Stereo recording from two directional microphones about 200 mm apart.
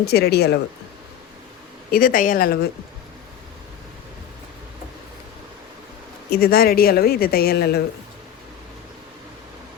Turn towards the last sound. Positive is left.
turn(degrees=50)  # may be behind; listen again after turning